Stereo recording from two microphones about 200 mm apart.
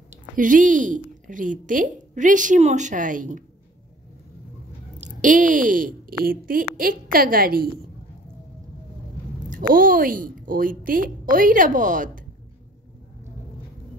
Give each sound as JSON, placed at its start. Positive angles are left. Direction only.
{"t": 0.1, "sound": "a woman's voice", "side_deg": -40}
{"t": 5.0, "sound": "a woman's voice", "side_deg": -40}
{"t": 9.5, "sound": "a woman's voice", "side_deg": -45}